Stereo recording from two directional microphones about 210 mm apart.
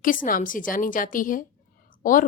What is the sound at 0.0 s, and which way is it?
A woman's voice, 40° left (ahead or behind).